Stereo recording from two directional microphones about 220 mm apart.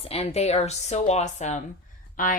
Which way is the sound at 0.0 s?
25° left (ahead or behind).